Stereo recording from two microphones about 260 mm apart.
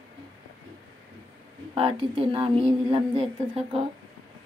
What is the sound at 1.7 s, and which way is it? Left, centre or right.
A woman's voice, centre.